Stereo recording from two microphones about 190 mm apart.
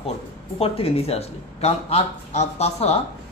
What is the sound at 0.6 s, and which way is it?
A man's voice, 30° left (ahead or behind).